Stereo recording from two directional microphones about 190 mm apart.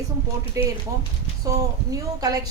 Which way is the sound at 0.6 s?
15° right (ahead or behind).